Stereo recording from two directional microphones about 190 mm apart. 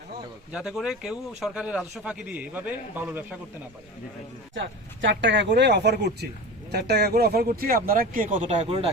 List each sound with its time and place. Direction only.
0.5 s speech: 5° right (ahead or behind)
4.5 s speech: 75° right (ahead or behind); by 8.6 s 40° right (ahead or behind)